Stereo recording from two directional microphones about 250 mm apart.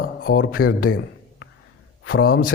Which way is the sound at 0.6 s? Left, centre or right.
Left.